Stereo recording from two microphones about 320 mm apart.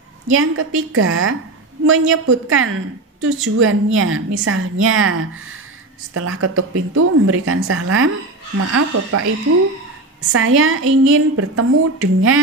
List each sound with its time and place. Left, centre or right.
0.3 s a woman's voice: right